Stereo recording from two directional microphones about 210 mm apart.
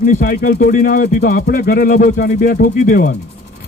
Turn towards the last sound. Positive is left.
turn(degrees=40)  # may be behind; listen again after turning